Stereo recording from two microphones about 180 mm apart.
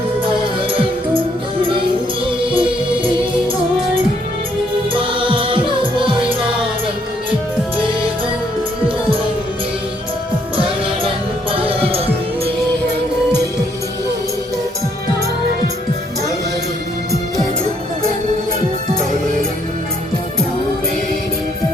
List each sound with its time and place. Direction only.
2.2 s music: 30° right (ahead or behind)
4.9 s music: 30° right (ahead or behind)
11.5 s heart sounds: 30° right (ahead or behind)